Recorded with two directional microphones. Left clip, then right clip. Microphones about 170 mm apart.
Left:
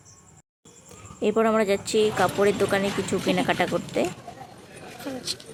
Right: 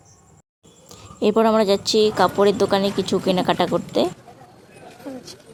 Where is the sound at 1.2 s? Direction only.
35° right (ahead or behind).